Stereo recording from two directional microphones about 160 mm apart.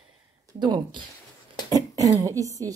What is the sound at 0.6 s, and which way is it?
A woman's voice, 25° right (ahead or behind).